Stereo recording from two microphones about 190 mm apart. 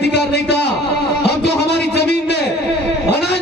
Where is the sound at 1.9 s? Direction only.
60° left (ahead or behind).